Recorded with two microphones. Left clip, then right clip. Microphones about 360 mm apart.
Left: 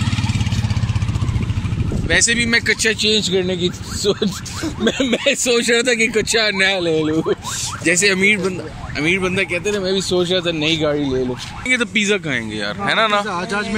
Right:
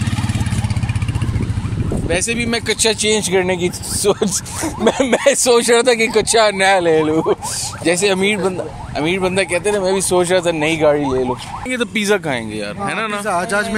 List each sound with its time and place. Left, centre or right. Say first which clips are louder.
2.0 s speech: left 3 dB; centre
3.2 s speech: right 2 dB; right
4.8 s speech: right 4 dB; centre
7.0 s speech: right 3 dB; right
7.8 s speech: even; centre
9.9 s speech: right 3 dB; right
11.6 s speech: left 3 dB; centre
12.8 s speech: left 5 dB; centre